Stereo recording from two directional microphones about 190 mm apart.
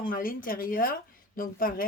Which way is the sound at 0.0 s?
45° left (ahead or behind).